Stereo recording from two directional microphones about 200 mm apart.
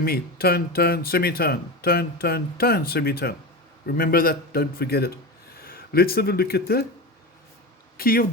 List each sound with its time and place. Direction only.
0.0 s speech: 50° left (ahead or behind)
7.9 s speech: 50° left (ahead or behind)